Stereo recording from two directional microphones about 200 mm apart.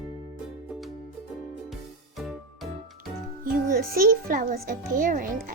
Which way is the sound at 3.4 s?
45° right (ahead or behind).